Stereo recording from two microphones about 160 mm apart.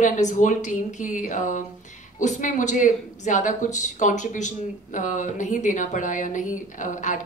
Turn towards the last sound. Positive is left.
turn(degrees=50)  # may be behind; listen again after turning